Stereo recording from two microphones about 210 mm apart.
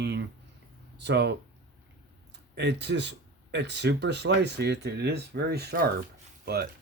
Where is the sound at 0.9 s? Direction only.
55° right (ahead or behind).